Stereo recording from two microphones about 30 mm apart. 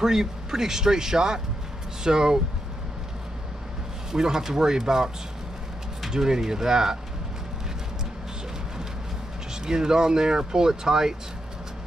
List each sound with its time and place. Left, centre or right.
0.0 s speech: centre
4.1 s speech: right
9.5 s speech: right